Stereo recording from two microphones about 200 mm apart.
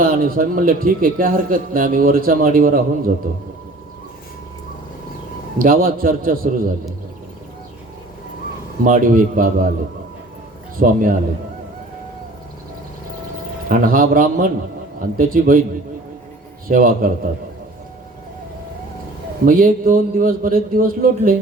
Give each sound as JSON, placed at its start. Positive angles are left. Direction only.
{"t": 0.0, "sound": "a man's voice", "side_deg": -45}
{"t": 5.5, "sound": "a man's voice", "side_deg": -45}
{"t": 8.8, "sound": "a man's voice", "side_deg": -40}
{"t": 10.8, "sound": "a man's voice", "side_deg": -40}
{"t": 13.7, "sound": "a man's voice", "side_deg": -45}
{"t": 16.6, "sound": "a man's voice", "side_deg": -45}
{"t": 19.5, "sound": "a man's voice", "side_deg": -45}